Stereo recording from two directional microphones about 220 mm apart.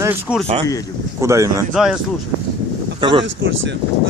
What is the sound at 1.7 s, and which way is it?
Speech, centre (ahead or behind).